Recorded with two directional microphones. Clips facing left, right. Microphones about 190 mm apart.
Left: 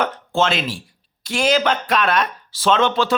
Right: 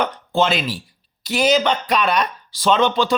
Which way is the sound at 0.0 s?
Centre (ahead or behind).